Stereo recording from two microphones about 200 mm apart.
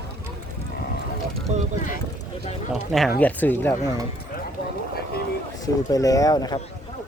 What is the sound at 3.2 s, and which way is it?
Speech, 10° left (ahead or behind).